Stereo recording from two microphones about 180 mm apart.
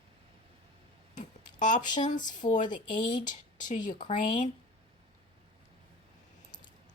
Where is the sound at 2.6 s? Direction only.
25° left (ahead or behind).